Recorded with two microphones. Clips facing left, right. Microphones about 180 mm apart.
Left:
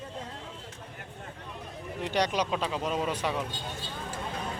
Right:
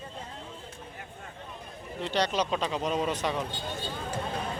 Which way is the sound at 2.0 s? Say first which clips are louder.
Even; 15° left (ahead or behind).